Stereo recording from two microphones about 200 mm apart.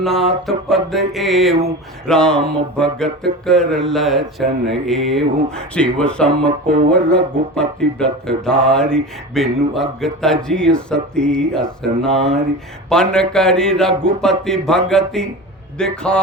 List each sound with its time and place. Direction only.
0.0 s music: centre (ahead or behind)
12.1 s a sound: 30° right (ahead or behind)
12.9 s music: 5° left (ahead or behind)